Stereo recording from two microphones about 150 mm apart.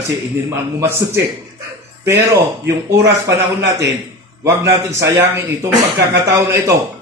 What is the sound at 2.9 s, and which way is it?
A man's voice, 20° right (ahead or behind).